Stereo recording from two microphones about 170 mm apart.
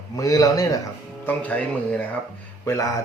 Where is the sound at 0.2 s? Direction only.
20° left (ahead or behind).